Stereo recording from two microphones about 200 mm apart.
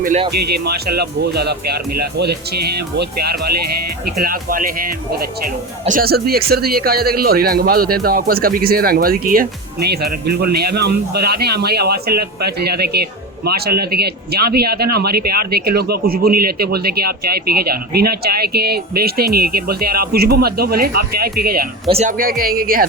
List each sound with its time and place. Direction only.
0.3 s speech: 50° right (ahead or behind)
5.8 s speech: 45° right (ahead or behind)
21.8 s speech: 30° right (ahead or behind)
22.2 s speech: 45° right (ahead or behind)